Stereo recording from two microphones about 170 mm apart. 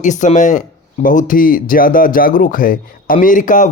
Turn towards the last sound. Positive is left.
turn(degrees=50)  # may be behind; listen again after turning